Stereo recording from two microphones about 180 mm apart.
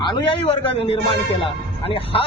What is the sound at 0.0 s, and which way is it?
Speech, 25° left (ahead or behind).